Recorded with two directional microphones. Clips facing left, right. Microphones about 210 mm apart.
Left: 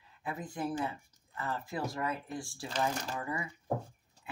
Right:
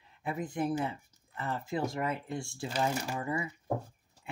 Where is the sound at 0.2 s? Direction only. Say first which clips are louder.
Right 4 dB; 25° right (ahead or behind).